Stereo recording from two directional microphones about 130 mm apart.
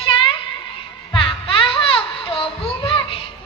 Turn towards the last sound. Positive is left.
turn(degrees=40)  # may be behind; listen again after turning